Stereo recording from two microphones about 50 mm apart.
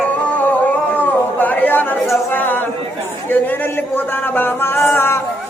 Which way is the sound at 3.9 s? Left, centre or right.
Left.